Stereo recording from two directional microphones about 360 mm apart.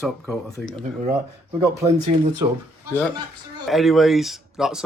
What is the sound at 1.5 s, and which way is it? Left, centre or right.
Speech, centre.